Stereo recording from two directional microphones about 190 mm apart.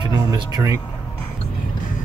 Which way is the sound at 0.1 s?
20° right (ahead or behind).